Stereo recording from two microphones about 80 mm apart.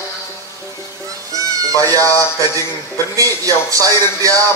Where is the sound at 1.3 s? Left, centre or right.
Right.